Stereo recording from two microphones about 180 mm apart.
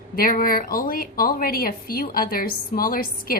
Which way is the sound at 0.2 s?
50° left (ahead or behind).